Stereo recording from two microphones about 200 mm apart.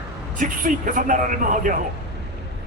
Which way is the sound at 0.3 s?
40° right (ahead or behind).